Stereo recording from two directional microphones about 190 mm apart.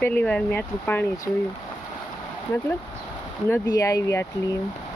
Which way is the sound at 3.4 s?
15° left (ahead or behind).